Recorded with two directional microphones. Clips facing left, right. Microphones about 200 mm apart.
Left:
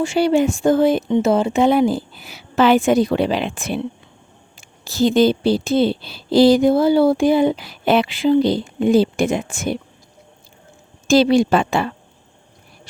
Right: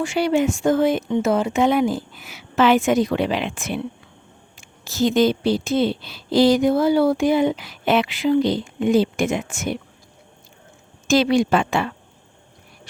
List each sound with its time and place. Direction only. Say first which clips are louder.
0.0 s speech: left 3 dB; 30° left (ahead or behind)
4.9 s speech: left 3 dB; 30° left (ahead or behind)
11.1 s speech: left 3 dB; 30° left (ahead or behind)